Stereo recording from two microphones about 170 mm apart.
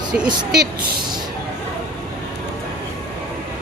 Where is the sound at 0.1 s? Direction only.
65° right (ahead or behind).